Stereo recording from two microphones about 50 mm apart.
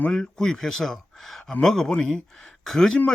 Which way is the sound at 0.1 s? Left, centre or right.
Centre.